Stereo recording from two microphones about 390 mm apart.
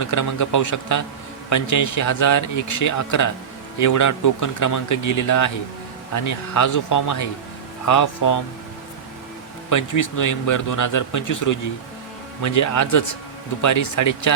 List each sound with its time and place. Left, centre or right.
0.0 s speech: left
9.6 s speech: left